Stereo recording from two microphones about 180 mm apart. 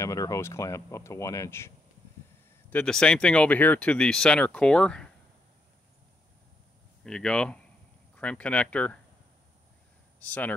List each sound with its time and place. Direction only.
0.0 s speech: 20° left (ahead or behind)
2.7 s speech: 5° left (ahead or behind)
7.0 s speech: 5° left (ahead or behind)
10.2 s speech: 10° left (ahead or behind)